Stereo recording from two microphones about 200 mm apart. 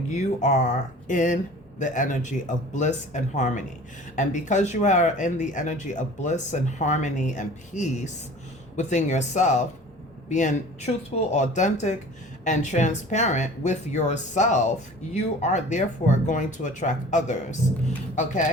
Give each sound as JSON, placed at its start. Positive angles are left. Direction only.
{"t": 0.1, "sound": "speech", "side_deg": 35}